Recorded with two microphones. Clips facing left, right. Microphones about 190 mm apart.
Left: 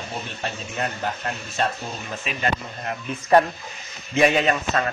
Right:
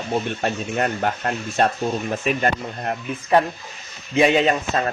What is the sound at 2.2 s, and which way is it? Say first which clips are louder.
Speech: right 2 dB; 50° right (ahead or behind).